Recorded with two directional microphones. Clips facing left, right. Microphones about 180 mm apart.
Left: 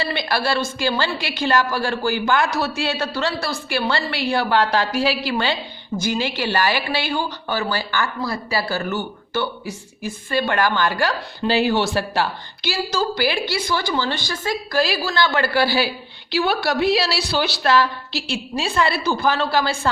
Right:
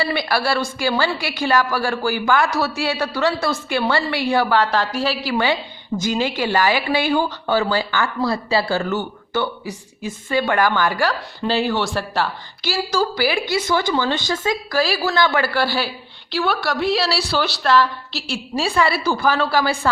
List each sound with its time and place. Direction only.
0.0 s a woman's voice: 10° right (ahead or behind)
4.5 s a woman's voice: centre (ahead or behind)
6.0 s speech: 20° right (ahead or behind)
11.4 s a woman's voice: 5° left (ahead or behind)
13.5 s speech: 20° right (ahead or behind)
14.8 s a woman's voice: 5° right (ahead or behind)
15.5 s a woman's voice: 5° left (ahead or behind)